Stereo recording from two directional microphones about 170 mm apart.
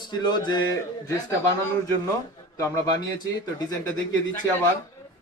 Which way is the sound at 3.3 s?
20° left (ahead or behind).